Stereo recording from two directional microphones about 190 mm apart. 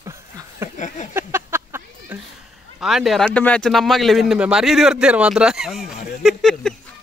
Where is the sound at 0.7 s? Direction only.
40° left (ahead or behind).